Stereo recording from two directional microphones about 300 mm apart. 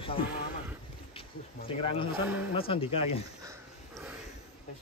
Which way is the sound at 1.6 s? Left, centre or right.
Centre.